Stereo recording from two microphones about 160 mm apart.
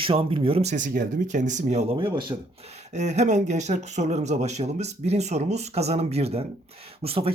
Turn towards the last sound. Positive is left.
turn(degrees=-35)  # may be behind; listen again after turning